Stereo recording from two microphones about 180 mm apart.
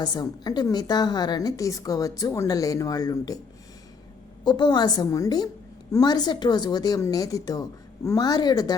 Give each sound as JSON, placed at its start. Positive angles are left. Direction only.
{"t": 0.0, "sound": "a woman's voice", "side_deg": 25}
{"t": 4.4, "sound": "a woman's voice", "side_deg": 25}